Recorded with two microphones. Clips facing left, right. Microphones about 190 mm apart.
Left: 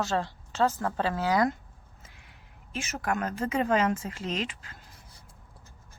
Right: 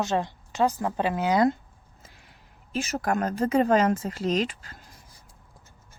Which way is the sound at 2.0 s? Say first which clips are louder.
Right 3 dB; 35° right (ahead or behind).